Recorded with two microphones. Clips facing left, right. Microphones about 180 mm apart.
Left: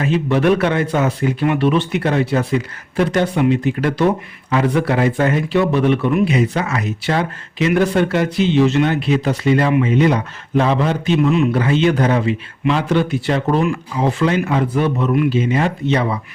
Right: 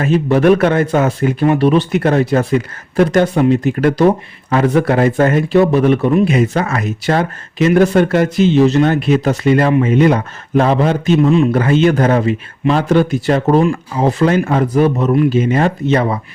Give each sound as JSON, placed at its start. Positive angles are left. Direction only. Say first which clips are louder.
{"t": 0.0, "sound": "speech", "louder": "right 4 dB", "side_deg": -45}
{"t": 6.3, "sound": "speech", "louder": "right 3 dB", "side_deg": -50}
{"t": 11.5, "sound": "speech", "louder": "right 3 dB", "side_deg": -50}